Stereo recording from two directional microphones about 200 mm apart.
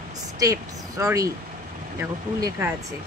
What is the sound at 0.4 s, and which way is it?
Speech, 15° right (ahead or behind).